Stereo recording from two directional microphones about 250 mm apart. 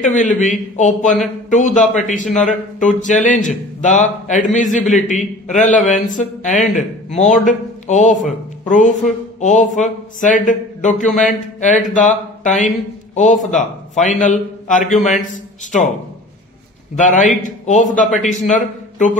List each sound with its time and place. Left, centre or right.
0.0 s speech: left
17.0 s speech: left